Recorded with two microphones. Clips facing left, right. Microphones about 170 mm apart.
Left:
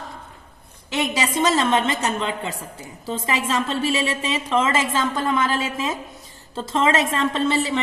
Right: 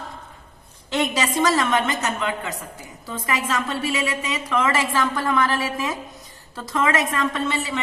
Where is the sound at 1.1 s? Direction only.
20° left (ahead or behind).